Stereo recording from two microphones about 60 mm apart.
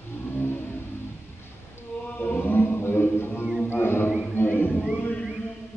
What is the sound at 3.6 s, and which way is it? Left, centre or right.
Music, left.